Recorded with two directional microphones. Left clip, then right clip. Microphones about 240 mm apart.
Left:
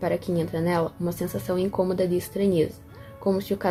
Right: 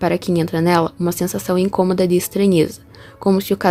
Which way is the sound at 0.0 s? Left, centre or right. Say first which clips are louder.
Right 7 dB; right.